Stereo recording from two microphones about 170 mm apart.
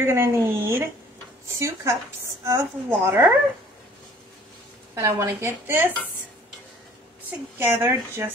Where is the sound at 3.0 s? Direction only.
15° right (ahead or behind).